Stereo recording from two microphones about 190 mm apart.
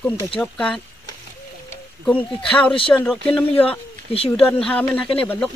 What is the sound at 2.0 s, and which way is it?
Speech, 5° left (ahead or behind).